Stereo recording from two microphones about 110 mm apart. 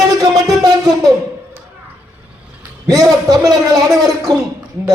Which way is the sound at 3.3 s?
35° right (ahead or behind).